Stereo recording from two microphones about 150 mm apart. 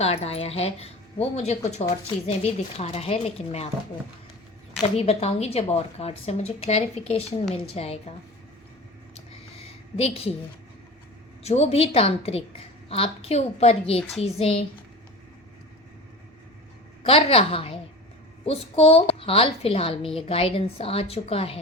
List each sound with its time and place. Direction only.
0.0 s speech: 45° left (ahead or behind)
4.8 s a woman's voice: 40° left (ahead or behind)
9.9 s a woman's voice: 40° left (ahead or behind)
11.4 s a woman's voice: 45° left (ahead or behind)
17.0 s a woman's voice: 40° left (ahead or behind)